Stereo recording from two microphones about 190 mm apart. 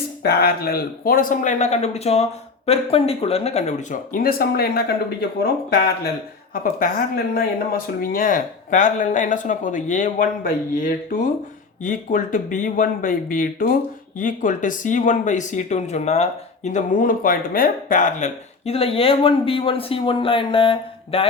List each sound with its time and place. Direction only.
0.2 s speech: 55° left (ahead or behind)
6.5 s speech: 50° left (ahead or behind); by 21.2 s 30° left (ahead or behind)